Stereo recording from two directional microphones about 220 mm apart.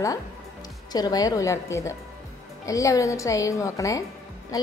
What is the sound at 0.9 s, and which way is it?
A woman's voice, 15° left (ahead or behind).